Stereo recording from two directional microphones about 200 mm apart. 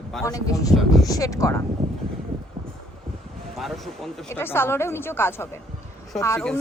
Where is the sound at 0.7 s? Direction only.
Centre (ahead or behind).